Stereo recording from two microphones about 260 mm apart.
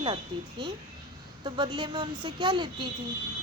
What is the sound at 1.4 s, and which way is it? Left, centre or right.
A child's voice, centre.